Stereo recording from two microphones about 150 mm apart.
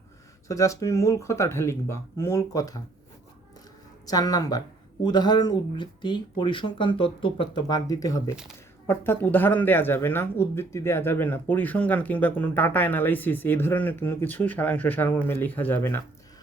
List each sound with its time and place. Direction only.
0.4 s speech: 20° left (ahead or behind)
4.0 s speech: 25° left (ahead or behind)